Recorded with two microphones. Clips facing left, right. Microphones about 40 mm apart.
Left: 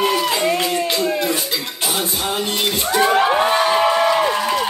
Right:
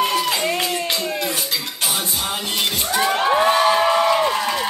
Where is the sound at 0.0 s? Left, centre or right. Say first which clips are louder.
Left 2 dB; centre.